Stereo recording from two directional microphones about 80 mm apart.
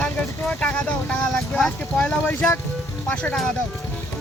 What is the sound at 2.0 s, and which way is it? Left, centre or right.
Speech, centre.